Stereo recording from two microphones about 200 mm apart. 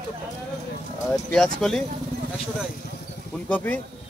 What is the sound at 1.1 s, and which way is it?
Speech, centre (ahead or behind).